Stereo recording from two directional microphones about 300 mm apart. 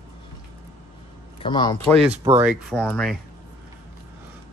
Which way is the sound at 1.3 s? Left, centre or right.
Centre.